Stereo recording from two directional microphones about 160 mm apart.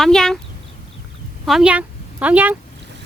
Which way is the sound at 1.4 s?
5° right (ahead or behind).